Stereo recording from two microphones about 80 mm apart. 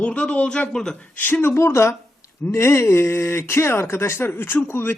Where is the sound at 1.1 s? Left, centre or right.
Left.